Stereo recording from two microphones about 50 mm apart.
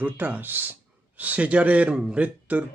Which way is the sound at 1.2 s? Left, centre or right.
Right.